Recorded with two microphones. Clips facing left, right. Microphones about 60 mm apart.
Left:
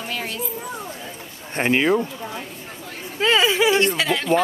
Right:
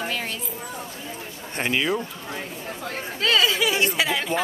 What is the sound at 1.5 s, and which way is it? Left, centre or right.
Speech, left.